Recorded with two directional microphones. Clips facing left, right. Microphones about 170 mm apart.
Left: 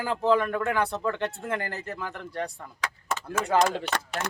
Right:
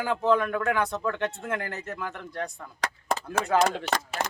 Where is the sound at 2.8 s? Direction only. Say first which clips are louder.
Right 3 dB; 35° right (ahead or behind).